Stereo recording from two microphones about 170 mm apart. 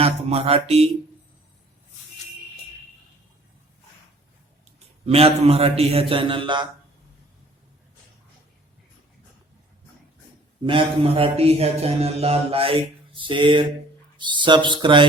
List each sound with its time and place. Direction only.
0.0 s speech: 35° right (ahead or behind)
5.0 s speech: 35° right (ahead or behind)
10.6 s speech: 30° right (ahead or behind)